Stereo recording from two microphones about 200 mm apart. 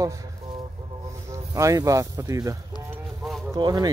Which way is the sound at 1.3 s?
15° right (ahead or behind).